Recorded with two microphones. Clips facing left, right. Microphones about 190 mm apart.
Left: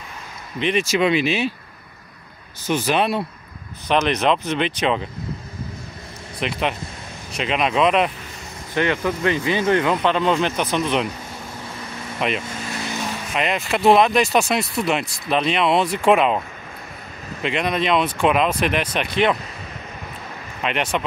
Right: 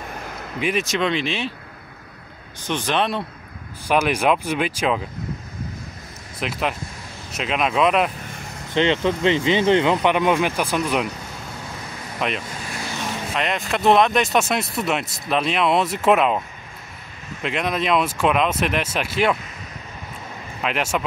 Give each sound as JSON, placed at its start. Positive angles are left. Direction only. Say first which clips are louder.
{"t": 0.6, "sound": "speech", "louder": "left 2 dB", "side_deg": -5}
{"t": 0.9, "sound": "speech", "louder": "left 4 dB", "side_deg": 5}
{"t": 2.6, "sound": "speech", "louder": "left 2 dB", "side_deg": 5}
{"t": 3.8, "sound": "speech", "louder": "even", "side_deg": -10}
{"t": 6.4, "sound": "speech", "louder": "left 1 dB", "side_deg": 0}
{"t": 8.7, "sound": "speech", "louder": "right 2 dB", "side_deg": -20}
{"t": 12.2, "sound": "speech", "louder": "left 2 dB", "side_deg": 0}
{"t": 17.4, "sound": "speech", "louder": "left 2 dB", "side_deg": 0}
{"t": 20.6, "sound": "speech", "louder": "left 1 dB", "side_deg": -5}